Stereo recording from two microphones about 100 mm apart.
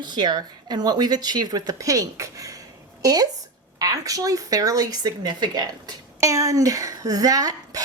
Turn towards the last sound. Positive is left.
turn(degrees=-40)  # may be behind; listen again after turning